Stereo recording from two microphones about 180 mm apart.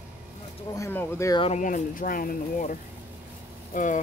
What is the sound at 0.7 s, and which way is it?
Speech, 15° left (ahead or behind).